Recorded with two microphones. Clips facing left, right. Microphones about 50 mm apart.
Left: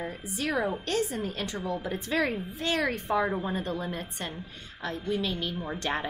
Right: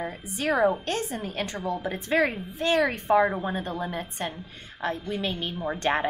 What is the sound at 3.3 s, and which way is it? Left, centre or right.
A woman's voice, right.